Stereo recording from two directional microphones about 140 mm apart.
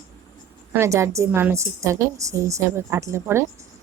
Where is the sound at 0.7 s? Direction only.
20° right (ahead or behind).